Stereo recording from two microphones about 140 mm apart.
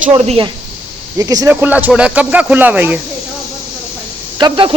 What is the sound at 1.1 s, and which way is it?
Speech, 25° right (ahead or behind).